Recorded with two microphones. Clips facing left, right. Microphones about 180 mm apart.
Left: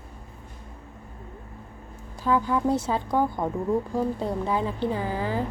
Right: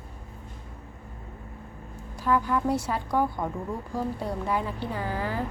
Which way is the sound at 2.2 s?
20° left (ahead or behind).